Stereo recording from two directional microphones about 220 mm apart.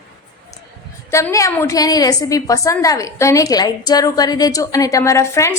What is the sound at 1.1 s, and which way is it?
A woman's voice, 15° left (ahead or behind).